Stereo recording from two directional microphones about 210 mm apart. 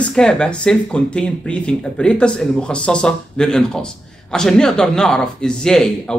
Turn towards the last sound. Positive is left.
turn(degrees=5)  # may be behind; listen again after turning